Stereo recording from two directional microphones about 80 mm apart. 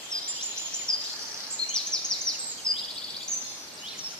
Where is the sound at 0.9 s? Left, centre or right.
Centre.